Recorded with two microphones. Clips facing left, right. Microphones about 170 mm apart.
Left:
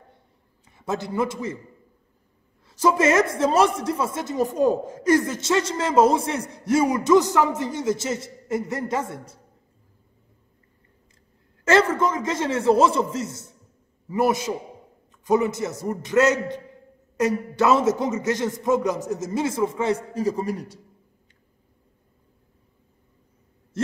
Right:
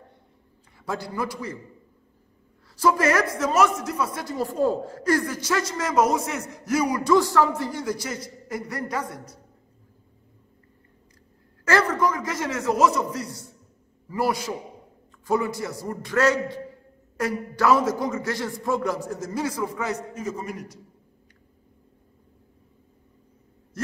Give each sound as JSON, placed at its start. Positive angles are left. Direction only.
{"t": 0.7, "sound": "a man's voice", "side_deg": 20}
{"t": 2.7, "sound": "a man's voice", "side_deg": 20}
{"t": 11.6, "sound": "a man's voice", "side_deg": 25}